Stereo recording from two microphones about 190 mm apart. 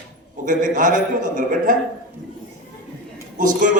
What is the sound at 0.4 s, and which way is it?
A man's voice, 45° right (ahead or behind).